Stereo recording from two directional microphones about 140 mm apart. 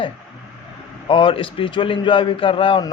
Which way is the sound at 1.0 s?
35° left (ahead or behind).